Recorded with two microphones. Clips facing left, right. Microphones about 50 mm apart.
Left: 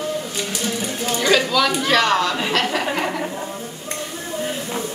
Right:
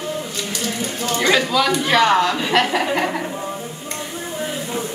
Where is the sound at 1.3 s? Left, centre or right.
Centre.